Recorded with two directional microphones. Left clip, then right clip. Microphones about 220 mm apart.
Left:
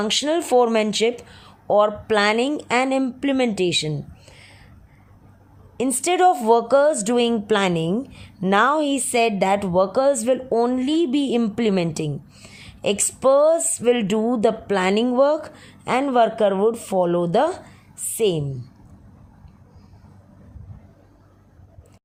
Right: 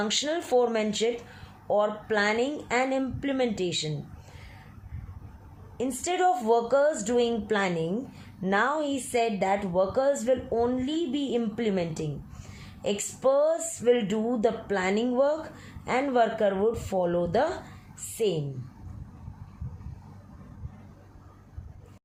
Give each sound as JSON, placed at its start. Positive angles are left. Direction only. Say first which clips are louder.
{"t": 0.0, "sound": "speech", "louder": "left 7 dB", "side_deg": 40}
{"t": 5.7, "sound": "speech", "louder": "left 8 dB", "side_deg": 45}